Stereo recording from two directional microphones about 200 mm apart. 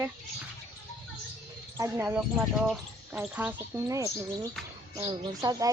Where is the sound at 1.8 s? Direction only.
10° right (ahead or behind).